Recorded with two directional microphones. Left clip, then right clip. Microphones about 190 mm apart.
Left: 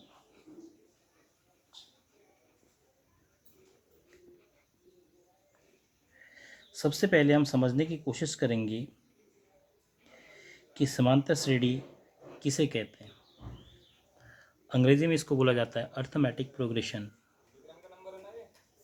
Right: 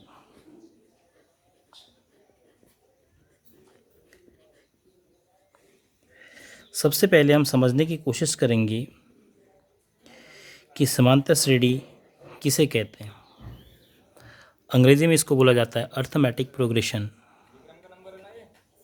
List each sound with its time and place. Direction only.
6.2 s speech: 55° right (ahead or behind)
10.0 s a sound: 50° right (ahead or behind)
12.4 s speech: 50° right (ahead or behind)
14.2 s speech: 50° right (ahead or behind)